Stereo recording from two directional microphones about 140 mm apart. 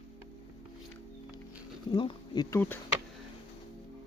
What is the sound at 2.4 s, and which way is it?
Speech, 15° left (ahead or behind).